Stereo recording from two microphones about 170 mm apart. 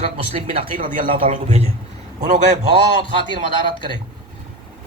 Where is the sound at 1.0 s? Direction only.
35° right (ahead or behind).